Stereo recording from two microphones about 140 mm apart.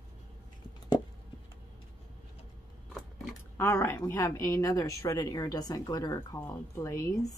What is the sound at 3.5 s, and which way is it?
Speech, 20° left (ahead or behind).